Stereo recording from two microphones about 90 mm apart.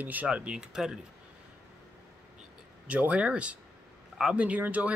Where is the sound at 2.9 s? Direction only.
15° right (ahead or behind).